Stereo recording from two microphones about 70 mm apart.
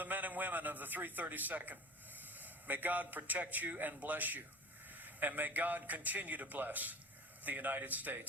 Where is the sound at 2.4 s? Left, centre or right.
Right.